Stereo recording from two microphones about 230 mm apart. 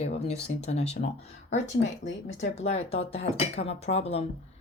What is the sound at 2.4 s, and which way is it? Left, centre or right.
A woman's voice, left.